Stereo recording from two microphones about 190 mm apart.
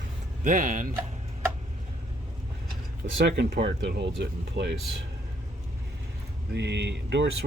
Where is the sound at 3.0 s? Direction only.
40° right (ahead or behind).